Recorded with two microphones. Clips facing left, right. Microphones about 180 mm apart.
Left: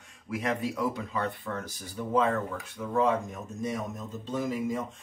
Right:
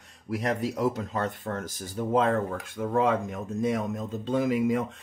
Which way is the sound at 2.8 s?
55° right (ahead or behind).